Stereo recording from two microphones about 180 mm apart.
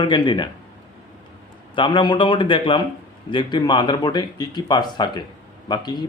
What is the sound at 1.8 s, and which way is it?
Speech, 25° left (ahead or behind).